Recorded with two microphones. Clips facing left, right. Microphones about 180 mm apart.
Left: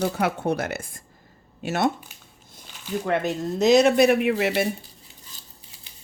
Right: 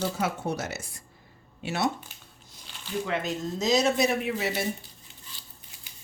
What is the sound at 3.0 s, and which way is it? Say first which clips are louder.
Speech: left 6 dB; 60° left (ahead or behind).